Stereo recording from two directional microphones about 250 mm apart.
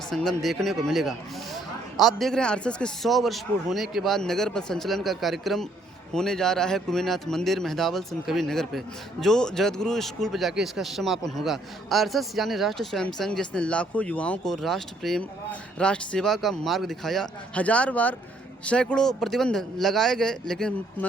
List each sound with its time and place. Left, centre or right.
0.1 s a man's voice: centre